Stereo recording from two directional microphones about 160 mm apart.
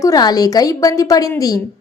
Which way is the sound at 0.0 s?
25° left (ahead or behind).